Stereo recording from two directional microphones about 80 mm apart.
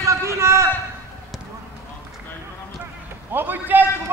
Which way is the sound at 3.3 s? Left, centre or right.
Right.